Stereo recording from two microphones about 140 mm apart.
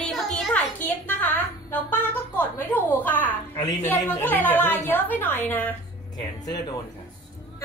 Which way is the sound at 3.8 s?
15° left (ahead or behind).